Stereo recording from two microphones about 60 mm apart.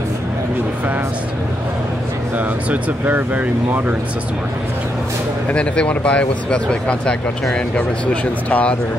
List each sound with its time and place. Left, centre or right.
2.3 s speech: right
5.5 s speech: centre